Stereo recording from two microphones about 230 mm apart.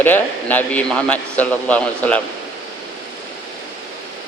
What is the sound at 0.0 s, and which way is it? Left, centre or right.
A man's voice, centre.